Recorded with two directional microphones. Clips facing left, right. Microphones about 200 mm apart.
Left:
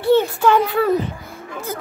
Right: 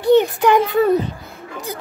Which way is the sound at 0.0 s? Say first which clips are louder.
Right 2 dB; 15° right (ahead or behind).